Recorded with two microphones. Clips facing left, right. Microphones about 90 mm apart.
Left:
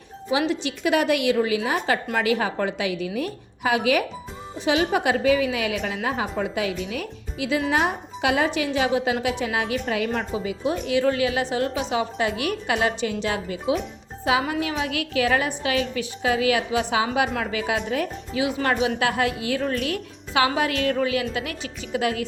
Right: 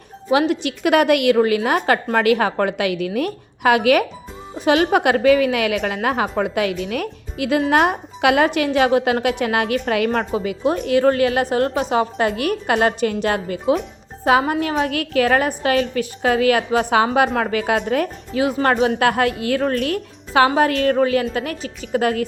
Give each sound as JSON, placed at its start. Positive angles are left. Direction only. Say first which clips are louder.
{"t": 0.3, "sound": "a woman's voice", "louder": "right 6 dB", "side_deg": -60}
{"t": 10.7, "sound": "a woman's voice", "louder": "right 6 dB", "side_deg": -45}